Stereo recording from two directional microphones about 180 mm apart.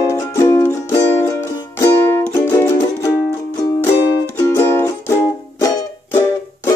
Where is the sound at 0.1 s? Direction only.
15° left (ahead or behind).